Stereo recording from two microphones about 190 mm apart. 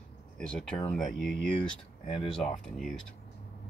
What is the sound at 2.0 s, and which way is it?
Speech, 30° left (ahead or behind).